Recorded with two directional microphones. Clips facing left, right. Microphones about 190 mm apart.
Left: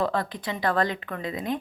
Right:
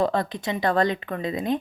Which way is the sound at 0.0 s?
25° right (ahead or behind).